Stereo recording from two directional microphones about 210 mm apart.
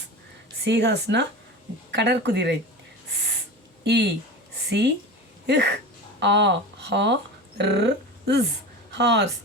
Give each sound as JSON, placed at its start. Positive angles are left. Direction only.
{"t": 0.6, "sound": "a woman's voice", "side_deg": -60}
{"t": 3.8, "sound": "a woman's voice", "side_deg": -55}
{"t": 5.5, "sound": "a woman's voice", "side_deg": -55}